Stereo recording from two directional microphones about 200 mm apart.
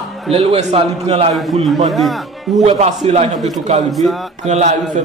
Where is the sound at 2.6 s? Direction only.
35° right (ahead or behind).